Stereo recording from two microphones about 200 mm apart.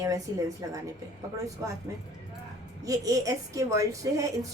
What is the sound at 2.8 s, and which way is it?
Speech, 15° right (ahead or behind).